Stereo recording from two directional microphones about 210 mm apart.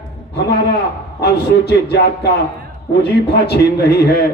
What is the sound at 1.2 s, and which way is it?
A man's voice, 50° left (ahead or behind).